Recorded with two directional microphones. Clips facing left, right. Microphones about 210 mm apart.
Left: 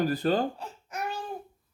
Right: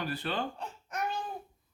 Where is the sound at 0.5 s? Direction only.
5° left (ahead or behind).